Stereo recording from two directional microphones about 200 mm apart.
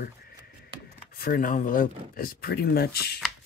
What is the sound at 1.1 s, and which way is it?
Speech, 45° left (ahead or behind).